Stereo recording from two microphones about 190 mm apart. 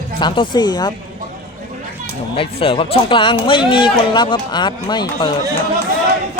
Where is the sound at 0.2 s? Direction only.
25° left (ahead or behind).